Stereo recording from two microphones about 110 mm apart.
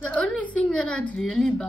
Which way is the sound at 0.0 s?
10° left (ahead or behind).